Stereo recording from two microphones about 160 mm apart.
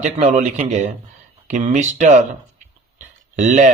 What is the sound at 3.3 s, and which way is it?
Speech, 50° right (ahead or behind).